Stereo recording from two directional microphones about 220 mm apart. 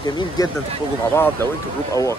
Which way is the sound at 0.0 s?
20° left (ahead or behind).